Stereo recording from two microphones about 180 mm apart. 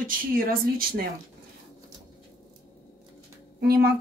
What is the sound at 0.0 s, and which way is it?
Speech, 55° right (ahead or behind).